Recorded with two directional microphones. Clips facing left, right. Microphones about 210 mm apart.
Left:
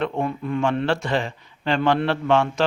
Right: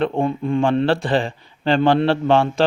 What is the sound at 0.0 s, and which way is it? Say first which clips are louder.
A man's voice: right 5 dB; 30° right (ahead or behind).